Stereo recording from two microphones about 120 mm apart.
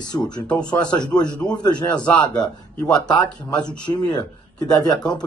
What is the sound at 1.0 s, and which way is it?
Speech, 35° left (ahead or behind).